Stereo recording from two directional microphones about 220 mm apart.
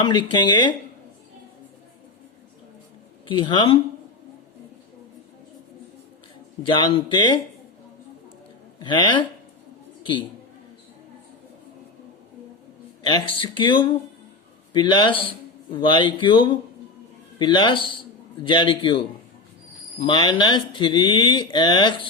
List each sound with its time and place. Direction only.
0.0 s speech: 20° left (ahead or behind)
3.2 s speech: 20° left (ahead or behind)
6.6 s speech: 20° left (ahead or behind)
8.8 s a woman's voice: 20° left (ahead or behind)
13.1 s speech: 20° left (ahead or behind)